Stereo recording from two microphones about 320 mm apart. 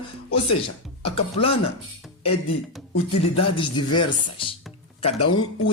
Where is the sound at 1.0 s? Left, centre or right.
Centre.